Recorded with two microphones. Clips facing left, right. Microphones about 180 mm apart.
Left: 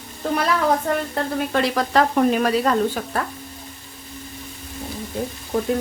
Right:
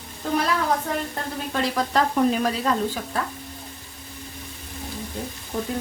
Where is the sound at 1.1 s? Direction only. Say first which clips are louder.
Left 6 dB; 70° left (ahead or behind).